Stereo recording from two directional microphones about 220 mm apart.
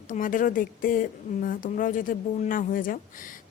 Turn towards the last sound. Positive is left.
turn(degrees=40)  # may be behind; listen again after turning